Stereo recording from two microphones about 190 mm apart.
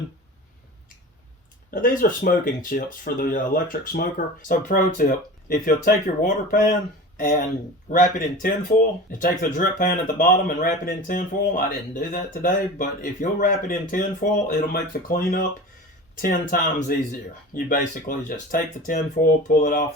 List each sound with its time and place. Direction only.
1.7 s speech: 45° left (ahead or behind)